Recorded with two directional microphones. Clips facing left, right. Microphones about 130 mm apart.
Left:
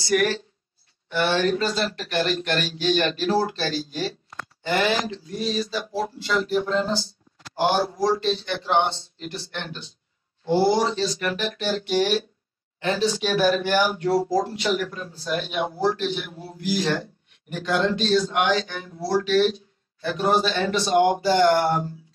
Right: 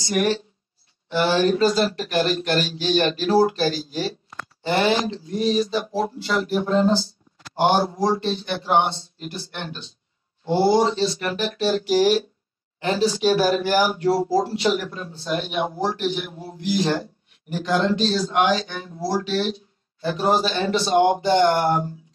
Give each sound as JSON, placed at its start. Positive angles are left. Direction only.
{"t": 0.0, "sound": "speech", "side_deg": -25}
{"t": 3.6, "sound": "speech", "side_deg": -30}